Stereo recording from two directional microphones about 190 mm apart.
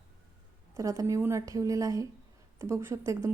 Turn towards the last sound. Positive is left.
turn(degrees=-15)  # may be behind; listen again after turning